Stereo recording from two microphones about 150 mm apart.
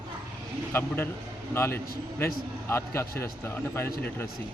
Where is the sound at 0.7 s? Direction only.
15° left (ahead or behind).